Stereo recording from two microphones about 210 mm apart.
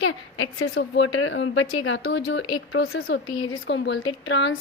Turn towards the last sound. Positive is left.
turn(degrees=60)  # may be behind; listen again after turning